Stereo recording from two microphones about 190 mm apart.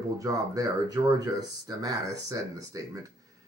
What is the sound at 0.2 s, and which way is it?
Speech, 20° right (ahead or behind).